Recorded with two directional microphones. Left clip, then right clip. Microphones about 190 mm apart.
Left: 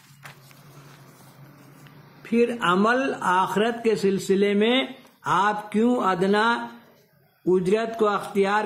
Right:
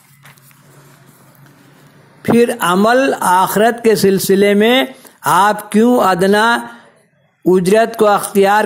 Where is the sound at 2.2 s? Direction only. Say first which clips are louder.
Right 10 dB; 35° right (ahead or behind).